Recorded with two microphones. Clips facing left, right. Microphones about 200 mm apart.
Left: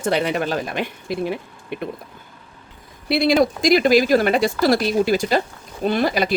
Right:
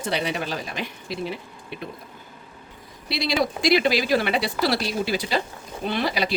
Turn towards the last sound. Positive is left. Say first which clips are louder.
# left 6 dB
turn(degrees=50)  # may be behind; listen again after turning